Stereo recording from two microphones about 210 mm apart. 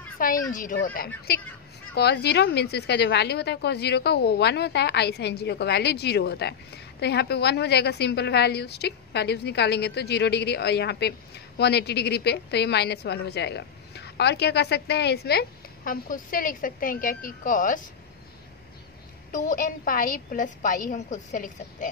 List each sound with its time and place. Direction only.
0.2 s a woman's voice: 40° left (ahead or behind)
19.3 s a woman's voice: 40° left (ahead or behind)